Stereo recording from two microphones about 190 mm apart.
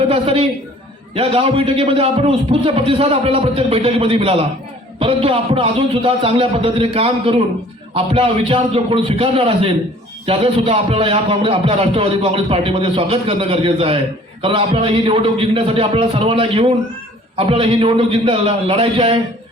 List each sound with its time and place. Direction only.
0.1 s a man's voice: 30° right (ahead or behind)